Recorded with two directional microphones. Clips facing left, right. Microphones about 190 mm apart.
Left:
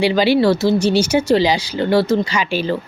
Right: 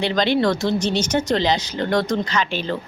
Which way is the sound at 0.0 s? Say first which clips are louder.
Left 5 dB; 10° left (ahead or behind).